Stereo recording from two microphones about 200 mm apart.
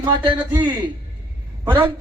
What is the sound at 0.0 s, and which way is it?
Speech, 20° right (ahead or behind).